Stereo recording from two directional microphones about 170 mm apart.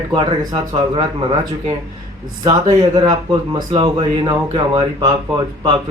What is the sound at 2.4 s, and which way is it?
Speech, 20° right (ahead or behind).